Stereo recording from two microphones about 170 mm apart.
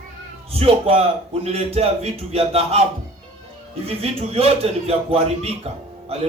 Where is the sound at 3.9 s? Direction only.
35° right (ahead or behind).